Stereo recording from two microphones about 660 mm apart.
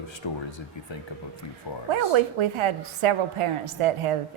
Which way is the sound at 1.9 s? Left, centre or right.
Right.